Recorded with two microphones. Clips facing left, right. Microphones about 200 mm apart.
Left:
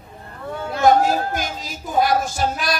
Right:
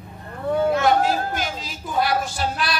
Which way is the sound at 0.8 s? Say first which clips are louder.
Left 3 dB; 45° left (ahead or behind).